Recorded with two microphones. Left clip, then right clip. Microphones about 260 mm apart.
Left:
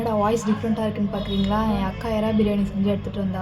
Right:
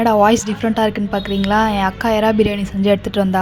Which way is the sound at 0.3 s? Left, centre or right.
Right.